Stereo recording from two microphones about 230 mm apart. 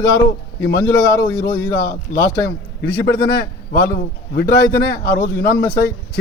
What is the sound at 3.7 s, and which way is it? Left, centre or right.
A man's voice, left.